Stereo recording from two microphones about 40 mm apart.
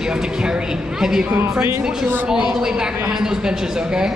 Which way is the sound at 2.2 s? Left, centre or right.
Right.